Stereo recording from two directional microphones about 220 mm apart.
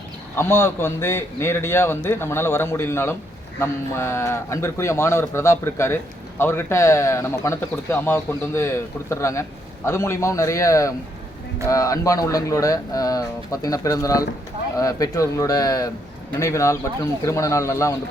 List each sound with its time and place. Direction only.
0.3 s speech: 10° left (ahead or behind)